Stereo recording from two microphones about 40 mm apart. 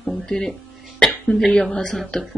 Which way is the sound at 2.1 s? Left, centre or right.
Centre.